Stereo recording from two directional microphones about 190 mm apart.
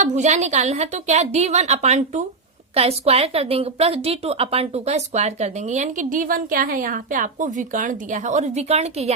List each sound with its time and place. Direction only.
0.0 s speech: 40° right (ahead or behind)